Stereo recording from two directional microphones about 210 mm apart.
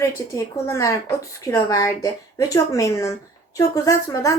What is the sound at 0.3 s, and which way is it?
A woman's voice, 15° left (ahead or behind).